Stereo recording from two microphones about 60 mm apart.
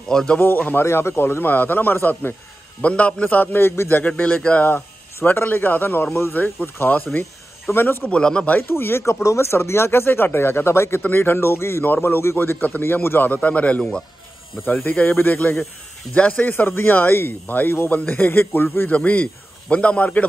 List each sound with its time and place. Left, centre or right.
0.1 s speech: centre
0.4 s speech: left
0.8 s speech: left
2.8 s a man's voice: left
3.5 s speech: left
4.2 s a man's voice: left
4.6 s speech: left
8.1 s speech: centre
8.5 s speech: left
11.8 s speech: left
13.3 s a man's voice: left
14.6 s speech: left
18.9 s a man's voice: left